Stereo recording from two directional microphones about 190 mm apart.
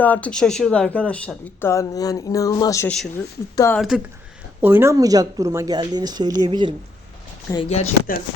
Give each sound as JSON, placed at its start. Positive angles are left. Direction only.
{"t": 0.0, "sound": "speech", "side_deg": 10}
{"t": 3.8, "sound": "speech", "side_deg": 0}
{"t": 7.5, "sound": "speech", "side_deg": 30}